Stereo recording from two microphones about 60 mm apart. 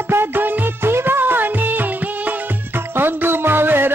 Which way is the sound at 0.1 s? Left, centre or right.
Right.